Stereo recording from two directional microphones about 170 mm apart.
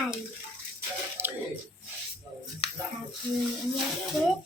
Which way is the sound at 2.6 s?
35° left (ahead or behind).